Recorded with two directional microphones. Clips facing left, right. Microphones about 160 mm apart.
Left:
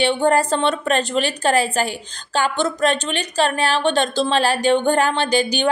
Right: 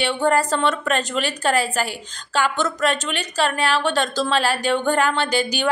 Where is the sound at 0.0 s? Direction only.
30° left (ahead or behind).